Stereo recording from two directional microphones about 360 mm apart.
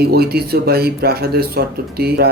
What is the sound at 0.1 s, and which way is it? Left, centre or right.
Speech, right.